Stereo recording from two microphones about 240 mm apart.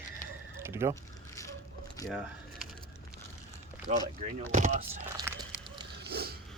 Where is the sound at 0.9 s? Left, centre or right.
Centre.